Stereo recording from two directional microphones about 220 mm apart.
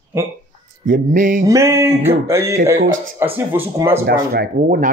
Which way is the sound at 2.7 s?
60° right (ahead or behind).